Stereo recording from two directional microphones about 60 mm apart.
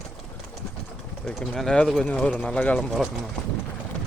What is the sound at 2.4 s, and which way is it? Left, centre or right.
Speech, left.